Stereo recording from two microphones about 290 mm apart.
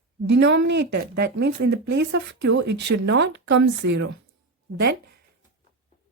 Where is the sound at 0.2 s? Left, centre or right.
Right.